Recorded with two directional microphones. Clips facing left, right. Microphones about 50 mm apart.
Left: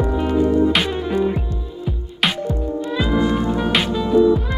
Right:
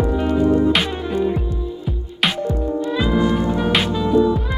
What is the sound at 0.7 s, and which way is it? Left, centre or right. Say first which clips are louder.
Music: left 1 dB; centre.